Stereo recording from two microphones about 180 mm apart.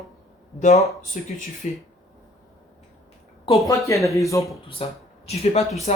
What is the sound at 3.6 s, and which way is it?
Speech, 15° left (ahead or behind).